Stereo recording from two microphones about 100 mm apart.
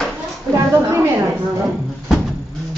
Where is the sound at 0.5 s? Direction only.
30° right (ahead or behind).